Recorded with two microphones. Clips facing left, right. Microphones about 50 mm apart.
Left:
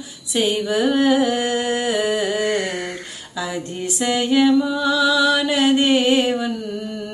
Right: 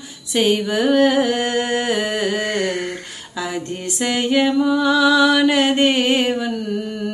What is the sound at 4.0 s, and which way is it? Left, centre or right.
Mantra, right.